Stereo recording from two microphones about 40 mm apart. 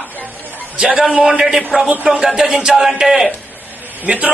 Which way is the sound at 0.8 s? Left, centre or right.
Centre.